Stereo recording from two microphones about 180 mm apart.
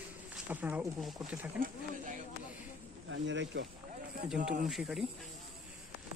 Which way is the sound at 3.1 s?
85° right.